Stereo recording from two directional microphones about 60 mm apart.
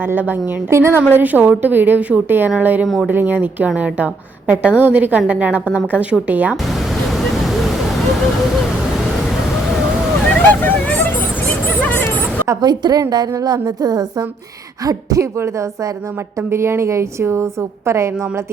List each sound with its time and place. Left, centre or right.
0.0 s speech: right
0.7 s a woman's voice: right
1.1 s a woman's voice: right
2.8 s speech: centre
3.1 s a woman's voice: right
6.7 s vehicle: centre
10.5 s speech: left
11.8 s a sound: left
12.5 s a woman's voice: right
14.8 s speech: right
15.4 s speech: right
16.5 s a woman's voice: right